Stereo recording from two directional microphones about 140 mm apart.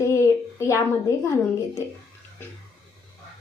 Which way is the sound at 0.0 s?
20° left (ahead or behind).